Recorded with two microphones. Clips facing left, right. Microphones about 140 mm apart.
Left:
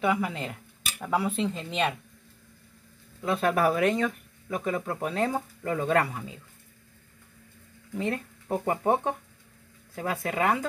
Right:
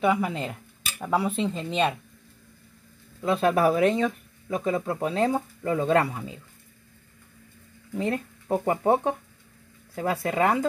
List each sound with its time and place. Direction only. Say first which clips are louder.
0.0 s dishes: right 3 dB; 25° right (ahead or behind)
1.1 s speech: right 2 dB; 25° right (ahead or behind)
3.2 s speech: right 3 dB; 25° right (ahead or behind)
8.0 s speech: right 3 dB; 35° right (ahead or behind)
10.0 s speech: right 3 dB; 30° right (ahead or behind)